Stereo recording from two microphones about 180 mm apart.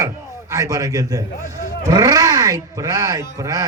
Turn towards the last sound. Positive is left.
turn(degrees=-20)  # may be behind; listen again after turning